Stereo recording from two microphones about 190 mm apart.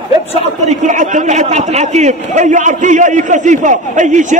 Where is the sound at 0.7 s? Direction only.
40° right (ahead or behind).